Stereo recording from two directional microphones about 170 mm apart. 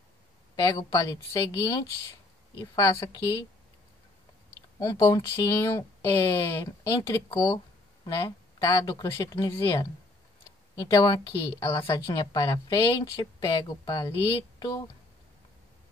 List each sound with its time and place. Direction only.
0.6 s a woman's voice: 20° left (ahead or behind)
4.7 s a woman's voice: 20° left (ahead or behind)